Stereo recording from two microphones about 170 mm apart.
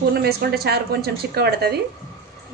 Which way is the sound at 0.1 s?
65° right (ahead or behind).